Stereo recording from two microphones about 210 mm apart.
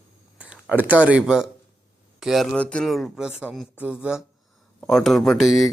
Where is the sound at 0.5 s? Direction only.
5° right (ahead or behind).